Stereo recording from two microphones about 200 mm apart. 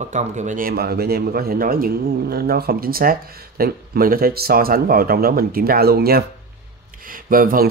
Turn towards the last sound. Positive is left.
turn(degrees=-45)  # may be behind; listen again after turning